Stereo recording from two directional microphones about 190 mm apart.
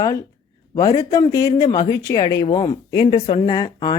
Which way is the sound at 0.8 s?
20° left (ahead or behind).